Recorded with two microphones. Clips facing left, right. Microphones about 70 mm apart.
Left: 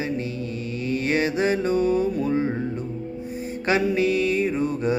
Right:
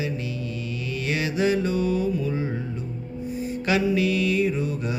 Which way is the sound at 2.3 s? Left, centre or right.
Left.